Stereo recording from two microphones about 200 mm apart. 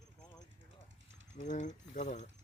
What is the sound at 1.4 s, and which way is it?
Speech, 35° left (ahead or behind).